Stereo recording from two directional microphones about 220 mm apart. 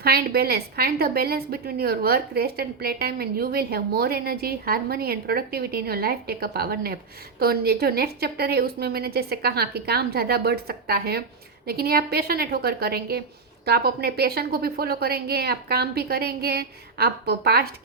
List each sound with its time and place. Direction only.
0.0 s a woman's voice: 45° right (ahead or behind)